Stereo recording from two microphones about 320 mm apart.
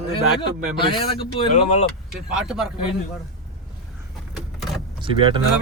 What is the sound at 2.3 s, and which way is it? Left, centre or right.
Speech, centre.